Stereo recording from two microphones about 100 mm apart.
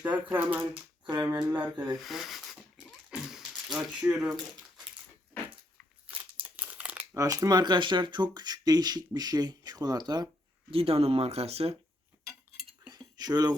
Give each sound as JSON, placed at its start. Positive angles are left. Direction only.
{"t": 0.0, "sound": "speech", "side_deg": -20}
{"t": 1.1, "sound": "speech", "side_deg": -40}
{"t": 2.0, "sound": "speech", "side_deg": 0}
{"t": 3.1, "sound": "a sound", "side_deg": -5}
{"t": 6.1, "sound": "crumpling", "side_deg": -15}
{"t": 7.1, "sound": "speech", "side_deg": -35}
{"t": 10.7, "sound": "speech", "side_deg": -75}
{"t": 12.9, "sound": "cutlery", "side_deg": -45}